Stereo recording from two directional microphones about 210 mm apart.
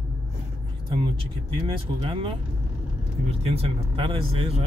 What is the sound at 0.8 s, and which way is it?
Speech, 25° right (ahead or behind).